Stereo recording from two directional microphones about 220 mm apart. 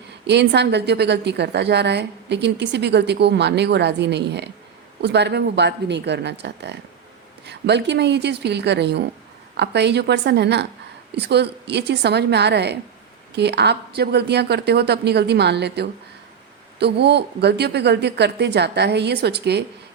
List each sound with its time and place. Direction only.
0.3 s a woman's voice: 50° right (ahead or behind)